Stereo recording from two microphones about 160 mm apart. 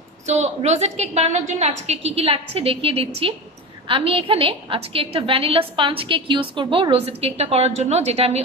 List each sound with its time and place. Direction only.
0.3 s a woman's voice: 45° right (ahead or behind)